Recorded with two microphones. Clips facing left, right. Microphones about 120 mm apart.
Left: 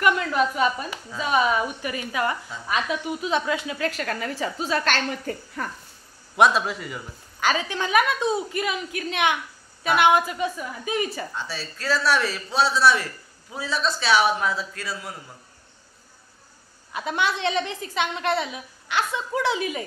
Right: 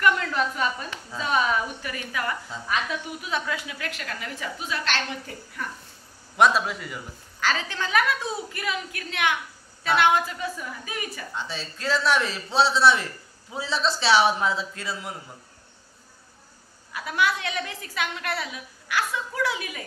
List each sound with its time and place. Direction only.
0.0 s a woman's voice: 15° left (ahead or behind); by 5.7 s 45° left (ahead or behind)
6.3 s a man's voice: centre (ahead or behind)
7.3 s a woman's voice: 15° left (ahead or behind)
11.3 s a man's voice: 20° right (ahead or behind)
16.9 s a woman's voice: 25° left (ahead or behind)